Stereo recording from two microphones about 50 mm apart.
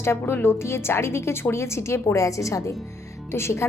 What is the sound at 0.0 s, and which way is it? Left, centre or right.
A woman's voice, left.